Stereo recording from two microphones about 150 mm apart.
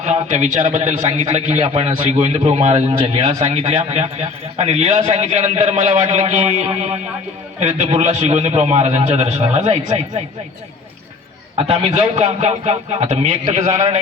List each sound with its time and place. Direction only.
0.0 s a man's voice: 50° right (ahead or behind)
11.5 s a man's voice: 40° right (ahead or behind)